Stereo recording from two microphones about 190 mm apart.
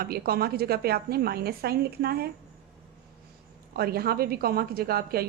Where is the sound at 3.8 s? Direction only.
55° right (ahead or behind).